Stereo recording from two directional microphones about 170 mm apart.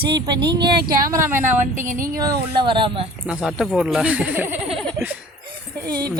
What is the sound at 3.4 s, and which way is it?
Speech, centre (ahead or behind).